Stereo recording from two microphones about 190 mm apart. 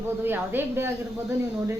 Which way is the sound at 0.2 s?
10° right (ahead or behind).